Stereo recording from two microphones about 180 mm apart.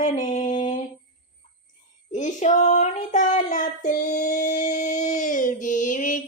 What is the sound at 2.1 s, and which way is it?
Child singing, 40° left (ahead or behind).